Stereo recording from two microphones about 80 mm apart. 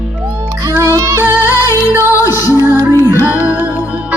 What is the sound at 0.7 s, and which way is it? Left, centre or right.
Music, right.